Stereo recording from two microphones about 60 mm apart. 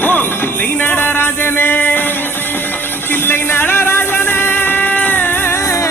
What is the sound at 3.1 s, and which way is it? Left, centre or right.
Music, left.